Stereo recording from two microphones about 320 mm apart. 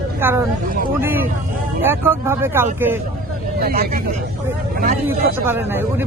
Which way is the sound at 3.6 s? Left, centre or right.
Right.